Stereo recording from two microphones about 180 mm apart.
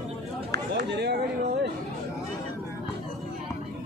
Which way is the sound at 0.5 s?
70° right (ahead or behind).